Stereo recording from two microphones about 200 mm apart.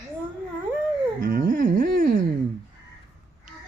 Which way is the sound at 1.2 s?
45° right (ahead or behind).